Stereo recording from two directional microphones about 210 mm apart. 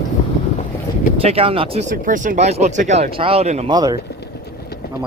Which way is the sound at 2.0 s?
40° right (ahead or behind).